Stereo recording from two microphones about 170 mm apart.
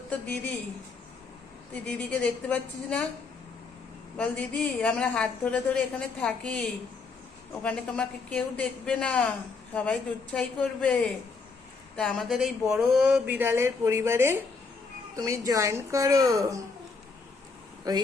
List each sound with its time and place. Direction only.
1.7 s a woman's voice: 5° left (ahead or behind)
4.2 s a woman's voice: 10° left (ahead or behind); by 16.6 s 20° right (ahead or behind)
17.9 s speech: 25° right (ahead or behind)